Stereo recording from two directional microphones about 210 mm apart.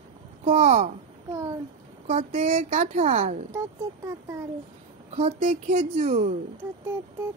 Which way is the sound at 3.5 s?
15° right (ahead or behind).